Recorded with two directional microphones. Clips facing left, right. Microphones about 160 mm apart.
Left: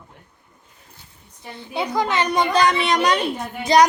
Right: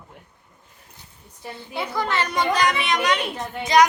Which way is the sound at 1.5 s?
15° left (ahead or behind).